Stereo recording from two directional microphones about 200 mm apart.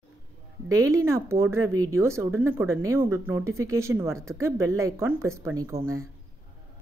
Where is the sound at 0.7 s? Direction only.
15° right (ahead or behind).